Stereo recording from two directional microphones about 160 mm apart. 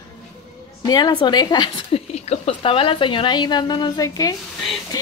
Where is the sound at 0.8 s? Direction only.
25° left (ahead or behind).